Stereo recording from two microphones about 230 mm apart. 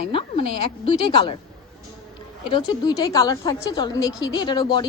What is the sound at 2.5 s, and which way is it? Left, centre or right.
Speech, centre.